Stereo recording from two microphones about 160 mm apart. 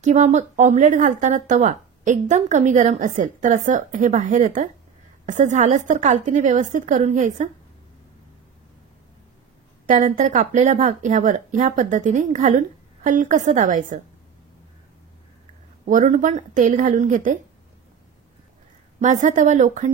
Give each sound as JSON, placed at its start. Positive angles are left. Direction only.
{"t": 0.0, "sound": "a woman's voice", "side_deg": -45}
{"t": 9.8, "sound": "a woman's voice", "side_deg": -50}
{"t": 15.8, "sound": "a woman's voice", "side_deg": -50}
{"t": 19.0, "sound": "a woman's voice", "side_deg": -50}